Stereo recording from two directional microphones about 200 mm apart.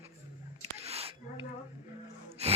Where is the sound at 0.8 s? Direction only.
30° right (ahead or behind).